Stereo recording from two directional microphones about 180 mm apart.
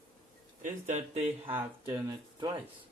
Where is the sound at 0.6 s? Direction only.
40° right (ahead or behind).